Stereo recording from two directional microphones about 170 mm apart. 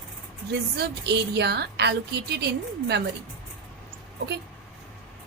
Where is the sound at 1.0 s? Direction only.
80° right.